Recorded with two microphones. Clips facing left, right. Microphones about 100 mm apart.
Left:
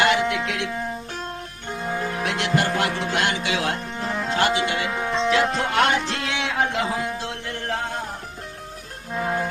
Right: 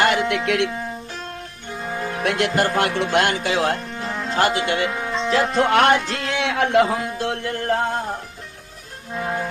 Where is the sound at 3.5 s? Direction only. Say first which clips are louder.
Right 4 dB; 35° right (ahead or behind).